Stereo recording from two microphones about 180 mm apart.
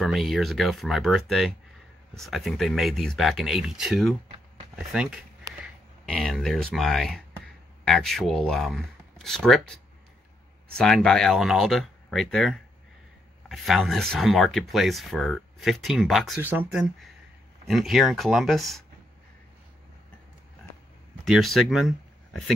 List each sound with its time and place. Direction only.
0.0 s speech: centre (ahead or behind)
10.8 s speech: 5° left (ahead or behind)
16.3 s speech: 10° right (ahead or behind)
21.3 s speech: centre (ahead or behind)